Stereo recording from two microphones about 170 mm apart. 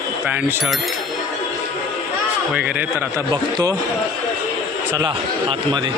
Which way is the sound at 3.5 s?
20° right (ahead or behind).